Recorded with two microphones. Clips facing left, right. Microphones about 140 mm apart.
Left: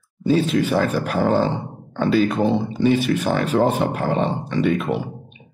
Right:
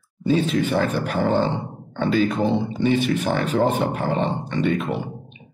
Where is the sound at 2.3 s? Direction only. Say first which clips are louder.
Left 2 dB; 5° left (ahead or behind).